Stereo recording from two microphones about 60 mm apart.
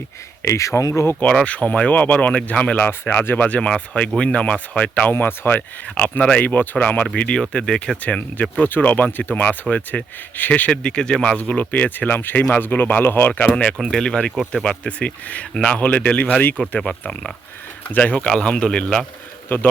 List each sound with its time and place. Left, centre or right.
0.4 s speech: left
1.5 s speech: left
2.8 s speech: left
5.1 s speech: left
5.9 s a man's voice: left
8.0 s speech: left
13.8 s a man's voice: centre; by 18.3 s left
18.3 s a man's voice: centre
19.5 s speech: left